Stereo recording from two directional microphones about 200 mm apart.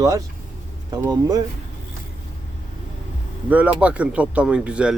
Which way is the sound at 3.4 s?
10° right (ahead or behind).